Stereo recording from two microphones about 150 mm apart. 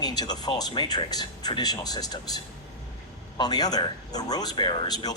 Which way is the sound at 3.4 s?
25° left (ahead or behind).